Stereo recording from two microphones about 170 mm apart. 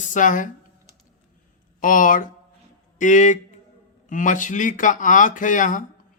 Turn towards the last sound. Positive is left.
turn(degrees=50)  # may be behind; listen again after turning